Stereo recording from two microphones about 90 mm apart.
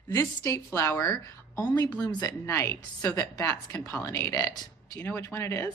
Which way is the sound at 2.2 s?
30° left (ahead or behind).